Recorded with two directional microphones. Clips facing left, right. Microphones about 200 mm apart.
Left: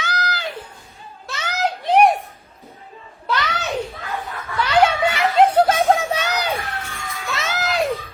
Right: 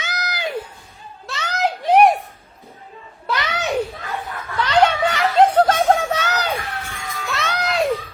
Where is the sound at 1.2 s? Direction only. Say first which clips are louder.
Right 1 dB; centre (ahead or behind).